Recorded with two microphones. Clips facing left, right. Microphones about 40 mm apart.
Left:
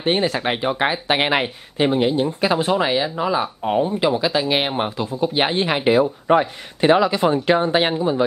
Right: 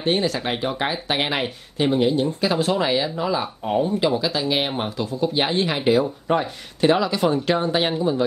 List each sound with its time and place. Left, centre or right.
0.0 s speech: left